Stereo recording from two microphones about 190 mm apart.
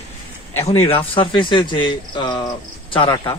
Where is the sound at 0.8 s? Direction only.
30° left (ahead or behind).